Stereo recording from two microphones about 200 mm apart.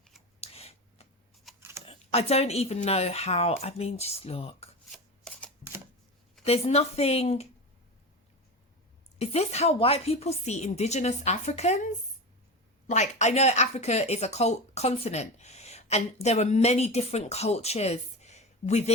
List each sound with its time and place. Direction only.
0.3 s scissors: 30° left (ahead or behind)
1.5 s a sound: centre (ahead or behind)
1.8 s speech: 30° left (ahead or behind)
4.9 s shuffling cards: 5° left (ahead or behind)
6.4 s speech: 30° left (ahead or behind)
9.1 s speech: 30° left (ahead or behind)
12.9 s speech: 35° left (ahead or behind)